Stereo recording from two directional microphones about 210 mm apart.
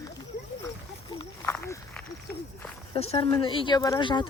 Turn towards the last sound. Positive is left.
turn(degrees=20)  # may be behind; listen again after turning